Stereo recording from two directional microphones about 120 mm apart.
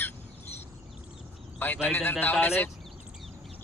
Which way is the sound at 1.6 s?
15° left (ahead or behind).